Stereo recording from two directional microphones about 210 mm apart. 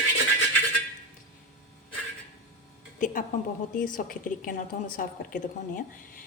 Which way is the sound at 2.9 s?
40° left (ahead or behind).